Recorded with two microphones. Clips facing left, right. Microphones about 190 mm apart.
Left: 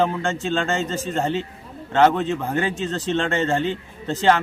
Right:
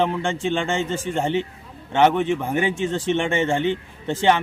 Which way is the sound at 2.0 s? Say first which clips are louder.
Even; 10° right (ahead or behind).